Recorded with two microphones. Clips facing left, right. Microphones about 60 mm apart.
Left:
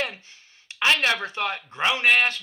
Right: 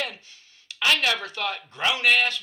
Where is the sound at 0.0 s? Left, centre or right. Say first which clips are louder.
Left 2 dB; left.